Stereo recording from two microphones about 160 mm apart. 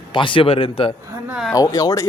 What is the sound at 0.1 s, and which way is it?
Speech, 30° left (ahead or behind).